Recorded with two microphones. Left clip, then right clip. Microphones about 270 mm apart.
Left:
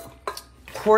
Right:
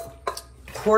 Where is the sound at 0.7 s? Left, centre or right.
Left.